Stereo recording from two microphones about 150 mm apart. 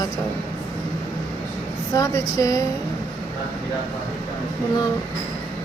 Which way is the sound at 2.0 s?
20° left (ahead or behind).